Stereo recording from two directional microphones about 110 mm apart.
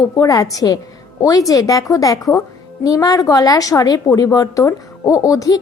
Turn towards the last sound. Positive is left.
turn(degrees=35)  # may be behind; listen again after turning